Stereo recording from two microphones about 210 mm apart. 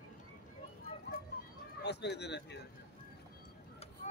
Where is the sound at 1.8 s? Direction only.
55° left (ahead or behind).